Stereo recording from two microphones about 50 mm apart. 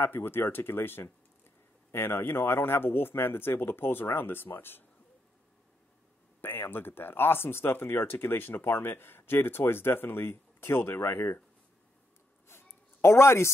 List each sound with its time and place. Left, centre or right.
0.0 s speech: left
6.4 s speech: left
13.0 s speech: left